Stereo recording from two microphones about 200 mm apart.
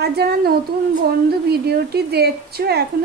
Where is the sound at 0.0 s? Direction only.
50° right (ahead or behind).